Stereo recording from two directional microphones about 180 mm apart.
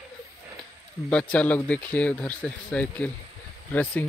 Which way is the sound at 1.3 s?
5° left (ahead or behind).